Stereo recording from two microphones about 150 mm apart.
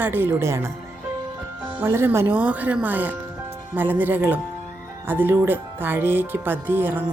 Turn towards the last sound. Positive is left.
turn(degrees=-15)  # may be behind; listen again after turning